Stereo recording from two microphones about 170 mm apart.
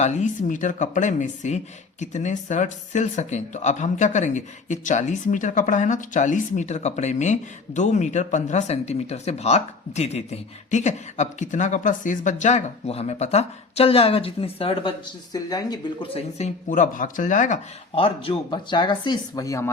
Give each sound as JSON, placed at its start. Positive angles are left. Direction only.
{"t": 0.0, "sound": "speech", "side_deg": 45}
{"t": 16.6, "sound": "speech", "side_deg": 50}
{"t": 17.9, "sound": "speech", "side_deg": 30}